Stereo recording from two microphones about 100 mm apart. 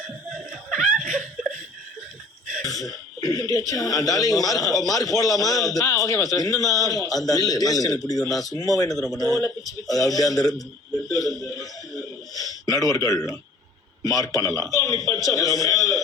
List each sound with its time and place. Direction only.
0.7 s laughter: 5° right (ahead or behind)
2.6 s a man's voice: 35° left (ahead or behind)
11.1 s a sound: 35° left (ahead or behind)
12.6 s a man's voice: 35° left (ahead or behind)